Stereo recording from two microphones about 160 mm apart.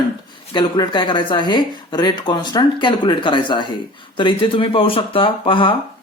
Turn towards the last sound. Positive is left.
turn(degrees=30)  # may be behind; listen again after turning